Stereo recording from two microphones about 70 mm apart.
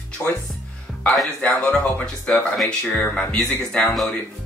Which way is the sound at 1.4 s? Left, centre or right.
Centre.